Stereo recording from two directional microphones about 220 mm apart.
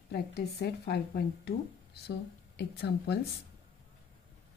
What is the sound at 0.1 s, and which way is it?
A woman's voice, 45° left (ahead or behind).